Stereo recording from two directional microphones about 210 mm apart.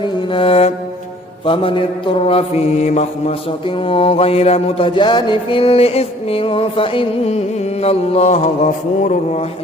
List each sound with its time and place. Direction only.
0.0 s music: 25° left (ahead or behind)
1.5 s mantra: 25° left (ahead or behind)